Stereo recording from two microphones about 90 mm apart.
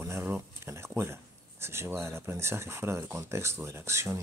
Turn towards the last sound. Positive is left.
turn(degrees=-35)  # may be behind; listen again after turning